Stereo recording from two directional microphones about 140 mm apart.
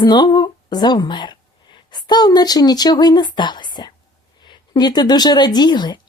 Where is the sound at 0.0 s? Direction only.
30° left (ahead or behind).